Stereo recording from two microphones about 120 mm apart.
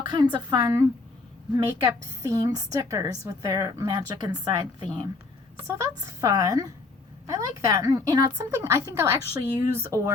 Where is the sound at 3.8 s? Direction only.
40° right (ahead or behind).